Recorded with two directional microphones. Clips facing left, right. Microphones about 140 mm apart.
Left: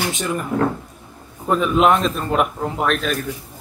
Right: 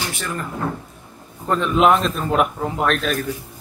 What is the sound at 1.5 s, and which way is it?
A man's voice, 5° left (ahead or behind).